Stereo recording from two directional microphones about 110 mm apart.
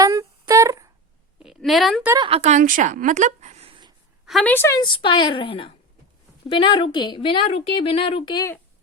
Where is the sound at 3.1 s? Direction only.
90° right.